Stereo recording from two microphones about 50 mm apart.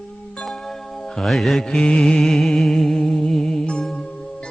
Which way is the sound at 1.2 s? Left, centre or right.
Centre.